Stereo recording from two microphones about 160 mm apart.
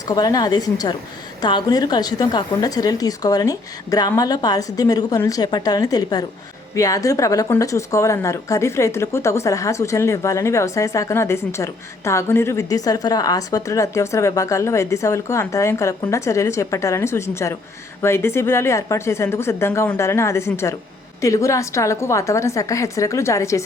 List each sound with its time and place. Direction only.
0.1 s a woman's voice: 25° left (ahead or behind)